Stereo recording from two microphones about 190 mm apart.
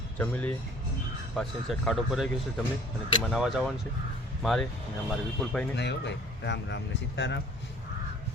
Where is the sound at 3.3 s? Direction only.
Centre (ahead or behind).